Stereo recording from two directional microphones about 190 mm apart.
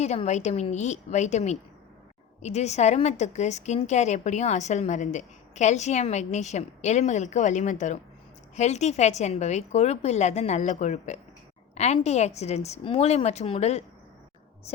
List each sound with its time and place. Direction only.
0.0 s a woman's voice: 35° left (ahead or behind)